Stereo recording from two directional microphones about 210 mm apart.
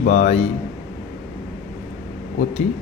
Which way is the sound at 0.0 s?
35° left (ahead or behind).